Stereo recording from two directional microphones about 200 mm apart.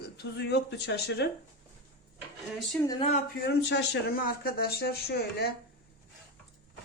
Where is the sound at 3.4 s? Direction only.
55° left (ahead or behind).